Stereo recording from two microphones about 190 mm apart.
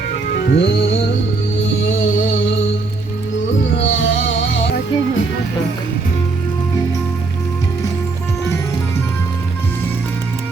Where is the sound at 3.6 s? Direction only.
75° left (ahead or behind).